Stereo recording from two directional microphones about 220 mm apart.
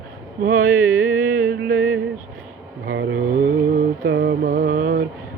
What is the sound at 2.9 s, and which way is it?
Mantra, 55° right (ahead or behind).